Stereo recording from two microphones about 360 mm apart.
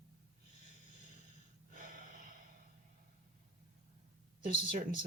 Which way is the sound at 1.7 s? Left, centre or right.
Right.